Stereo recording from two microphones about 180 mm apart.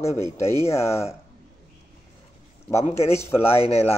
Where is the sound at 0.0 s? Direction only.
15° left (ahead or behind).